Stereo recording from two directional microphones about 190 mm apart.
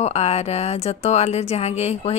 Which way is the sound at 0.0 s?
35° left (ahead or behind).